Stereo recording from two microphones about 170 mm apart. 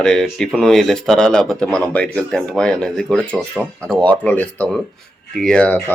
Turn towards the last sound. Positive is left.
turn(degrees=5)  # may be behind; listen again after turning